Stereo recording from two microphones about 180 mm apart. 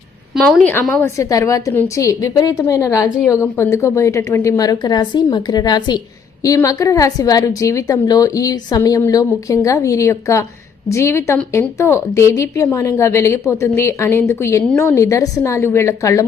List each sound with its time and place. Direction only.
0.3 s a woman's voice: centre (ahead or behind); by 16.2 s 15° left (ahead or behind)